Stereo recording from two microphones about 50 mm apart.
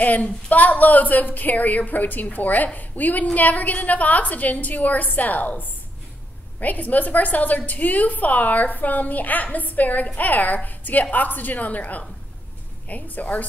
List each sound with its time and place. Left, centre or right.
0.0 s a woman's voice: left